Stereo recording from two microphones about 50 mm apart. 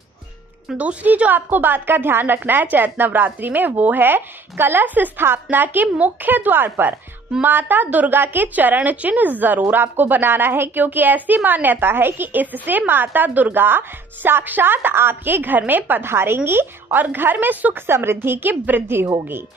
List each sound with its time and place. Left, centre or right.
0.7 s a woman's voice: right
16.1 s a woman's voice: right
16.4 s a woman's voice: right
17.8 s a woman's voice: right